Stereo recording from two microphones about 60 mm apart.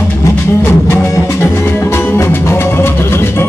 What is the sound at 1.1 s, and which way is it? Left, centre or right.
Music, left.